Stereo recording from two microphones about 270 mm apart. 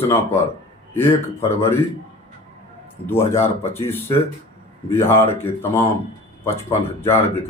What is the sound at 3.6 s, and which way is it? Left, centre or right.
Speech, centre.